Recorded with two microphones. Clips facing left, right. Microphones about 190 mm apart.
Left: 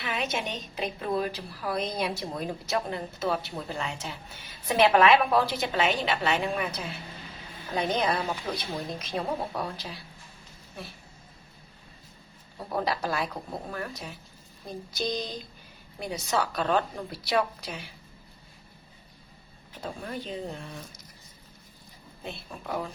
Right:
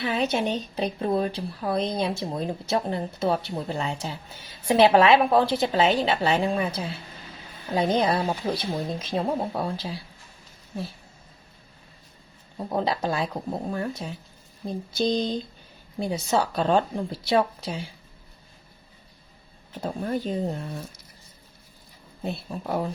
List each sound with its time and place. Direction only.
0.0 s a woman's voice: 35° right (ahead or behind)
12.5 s a woman's voice: 25° right (ahead or behind)
19.8 s speech: 40° right (ahead or behind)
22.2 s speech: 35° right (ahead or behind)